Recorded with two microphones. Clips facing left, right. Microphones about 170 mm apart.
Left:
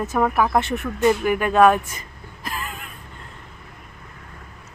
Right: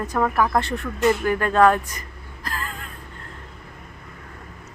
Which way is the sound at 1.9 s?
25° left (ahead or behind).